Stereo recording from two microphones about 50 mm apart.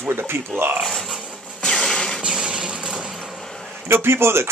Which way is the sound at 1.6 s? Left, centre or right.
Centre.